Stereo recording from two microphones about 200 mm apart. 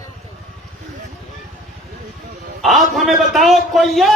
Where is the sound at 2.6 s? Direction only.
Centre (ahead or behind).